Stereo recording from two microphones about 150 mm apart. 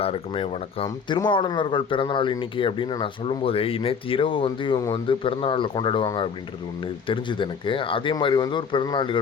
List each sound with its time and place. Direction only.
0.0 s speech: 40° left (ahead or behind)
7.1 s speech: 35° left (ahead or behind)